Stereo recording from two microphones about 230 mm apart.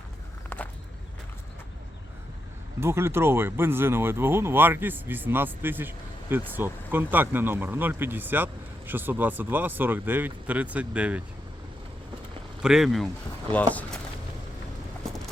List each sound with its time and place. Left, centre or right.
0.5 s walk: centre
2.8 s speech: centre
12.6 s speech: centre